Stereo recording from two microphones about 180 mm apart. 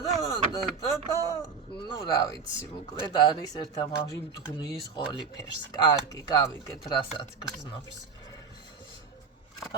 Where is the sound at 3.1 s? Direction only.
20° left (ahead or behind).